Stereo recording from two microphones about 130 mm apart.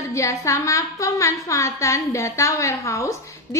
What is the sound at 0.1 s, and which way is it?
A woman's voice, 25° left (ahead or behind).